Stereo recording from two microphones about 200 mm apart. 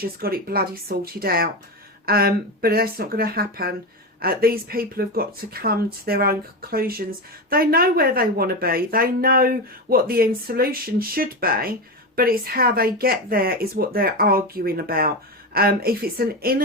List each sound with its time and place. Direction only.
0.0 s speech: 50° right (ahead or behind)